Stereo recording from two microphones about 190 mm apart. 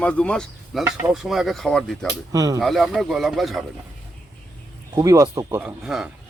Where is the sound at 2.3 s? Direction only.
20° right (ahead or behind).